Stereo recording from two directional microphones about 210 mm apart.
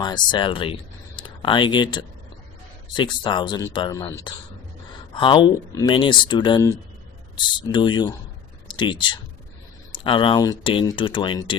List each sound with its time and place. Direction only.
0.0 s speech: 20° left (ahead or behind)